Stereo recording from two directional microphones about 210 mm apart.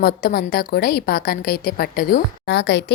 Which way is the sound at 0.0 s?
45° left (ahead or behind).